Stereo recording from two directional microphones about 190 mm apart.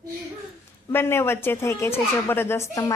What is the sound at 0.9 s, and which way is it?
Speech, 10° left (ahead or behind).